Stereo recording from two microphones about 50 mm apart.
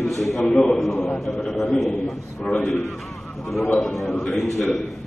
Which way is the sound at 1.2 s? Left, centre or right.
Centre.